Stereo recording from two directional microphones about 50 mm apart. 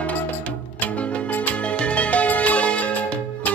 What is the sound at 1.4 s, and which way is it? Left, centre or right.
Music, left.